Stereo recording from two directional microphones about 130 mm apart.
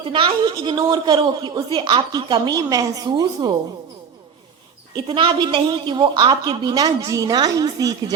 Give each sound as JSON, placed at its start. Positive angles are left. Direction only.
{"t": 0.0, "sound": "a woman's voice", "side_deg": -40}
{"t": 5.0, "sound": "a woman's voice", "side_deg": -45}